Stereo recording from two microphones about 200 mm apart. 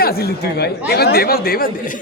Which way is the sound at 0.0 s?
50° left (ahead or behind).